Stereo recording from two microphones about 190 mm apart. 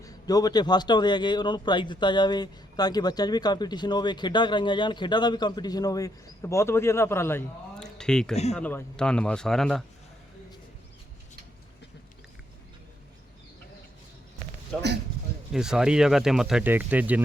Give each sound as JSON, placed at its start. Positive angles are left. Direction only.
{"t": 0.0, "sound": "a man's voice", "side_deg": 20}
{"t": 15.5, "sound": "speech", "side_deg": -5}